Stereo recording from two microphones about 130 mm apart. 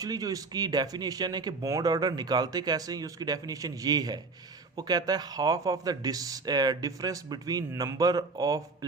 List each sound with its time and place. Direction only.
0.0 s speech: 30° right (ahead or behind)